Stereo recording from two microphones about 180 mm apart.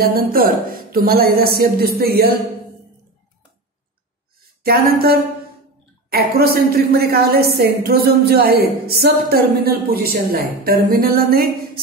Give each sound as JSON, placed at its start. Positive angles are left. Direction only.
{"t": 0.0, "sound": "a woman's voice", "side_deg": -60}
{"t": 4.6, "sound": "a woman's voice", "side_deg": -55}